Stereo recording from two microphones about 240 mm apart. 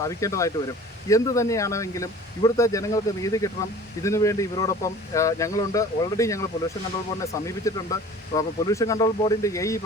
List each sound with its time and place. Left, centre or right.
0.0 s speech: centre